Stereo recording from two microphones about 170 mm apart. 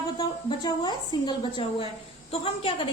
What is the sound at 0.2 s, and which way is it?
A woman's voice, 25° left (ahead or behind).